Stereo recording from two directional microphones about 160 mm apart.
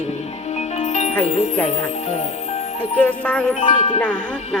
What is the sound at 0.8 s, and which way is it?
Music, 45° left (ahead or behind).